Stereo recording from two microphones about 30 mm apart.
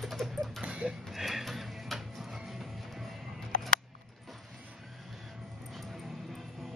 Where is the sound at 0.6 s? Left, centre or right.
Right.